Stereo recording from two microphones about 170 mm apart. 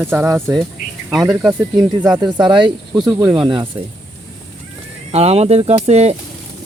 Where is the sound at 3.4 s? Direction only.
25° right (ahead or behind).